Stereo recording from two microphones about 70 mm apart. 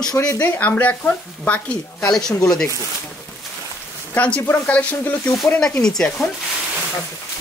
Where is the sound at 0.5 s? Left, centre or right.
Left.